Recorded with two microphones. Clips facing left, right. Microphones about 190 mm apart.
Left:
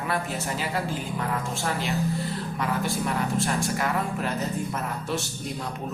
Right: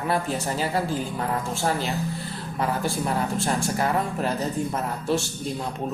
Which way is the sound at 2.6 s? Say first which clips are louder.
Right 3 dB; 35° right (ahead or behind).